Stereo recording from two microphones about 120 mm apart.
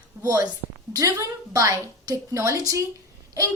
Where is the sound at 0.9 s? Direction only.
30° right (ahead or behind).